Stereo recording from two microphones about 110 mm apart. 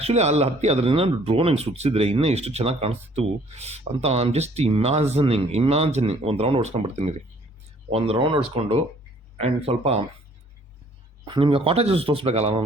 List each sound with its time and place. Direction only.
0.0 s speech: 80° right
7.9 s speech: 65° right (ahead or behind)
9.4 s speech: 70° right (ahead or behind)
11.3 s speech: 50° right (ahead or behind); by 12.6 s 65° right (ahead or behind)